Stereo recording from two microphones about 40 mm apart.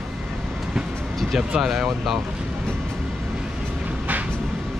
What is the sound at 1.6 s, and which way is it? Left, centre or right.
Speech, centre.